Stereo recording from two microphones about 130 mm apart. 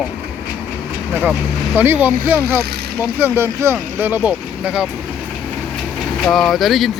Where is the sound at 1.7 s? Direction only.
15° right (ahead or behind).